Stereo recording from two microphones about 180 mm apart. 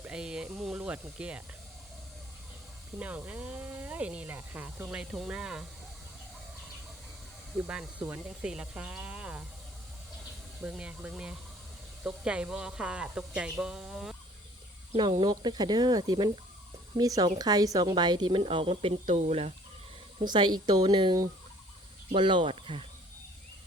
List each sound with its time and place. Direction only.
0.0 s speech: 5° right (ahead or behind)
3.0 s speech: 10° right (ahead or behind)
7.7 s speech: 5° right (ahead or behind)
10.6 s speech: 5° right (ahead or behind)
15.2 s speech: 25° right (ahead or behind)